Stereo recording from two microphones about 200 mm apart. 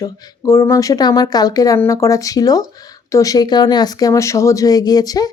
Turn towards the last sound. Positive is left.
turn(degrees=20)  # may be behind; listen again after turning